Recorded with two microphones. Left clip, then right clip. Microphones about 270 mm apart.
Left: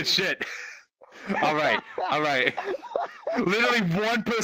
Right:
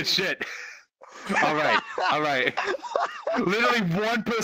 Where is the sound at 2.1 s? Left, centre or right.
Centre.